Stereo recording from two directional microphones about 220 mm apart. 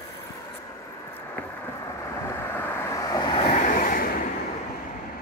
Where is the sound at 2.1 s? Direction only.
10° left (ahead or behind); by 4.1 s 40° left (ahead or behind).